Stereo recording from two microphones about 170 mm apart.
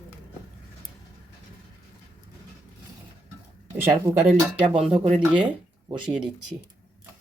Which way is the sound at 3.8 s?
15° right (ahead or behind).